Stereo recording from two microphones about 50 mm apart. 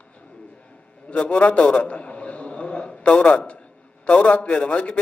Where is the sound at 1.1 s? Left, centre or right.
Left.